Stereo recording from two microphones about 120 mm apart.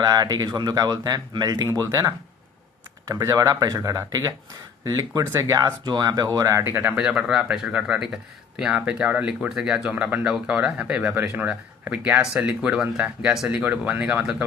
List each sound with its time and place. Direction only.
0.0 s speech: 30° right (ahead or behind)
6.9 s speech: 5° right (ahead or behind)